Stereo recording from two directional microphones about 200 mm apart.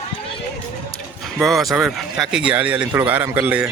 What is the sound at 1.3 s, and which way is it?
Speech, centre (ahead or behind).